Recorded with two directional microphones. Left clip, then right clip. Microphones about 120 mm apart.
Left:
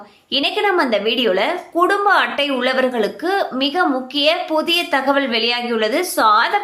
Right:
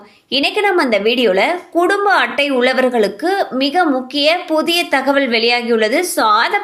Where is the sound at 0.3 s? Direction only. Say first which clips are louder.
Right 2 dB; 25° right (ahead or behind).